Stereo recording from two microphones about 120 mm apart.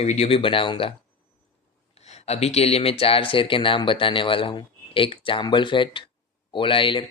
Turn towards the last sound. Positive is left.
turn(degrees=45)  # may be behind; listen again after turning